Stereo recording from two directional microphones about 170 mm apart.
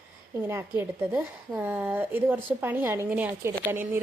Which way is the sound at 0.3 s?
15° right (ahead or behind).